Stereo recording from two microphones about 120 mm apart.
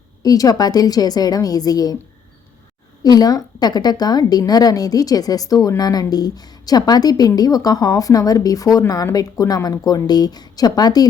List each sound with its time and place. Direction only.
0.2 s a woman's voice: 30° left (ahead or behind)
3.0 s a woman's voice: 35° left (ahead or behind)